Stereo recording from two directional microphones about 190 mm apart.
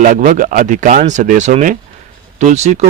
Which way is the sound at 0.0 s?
45° right (ahead or behind).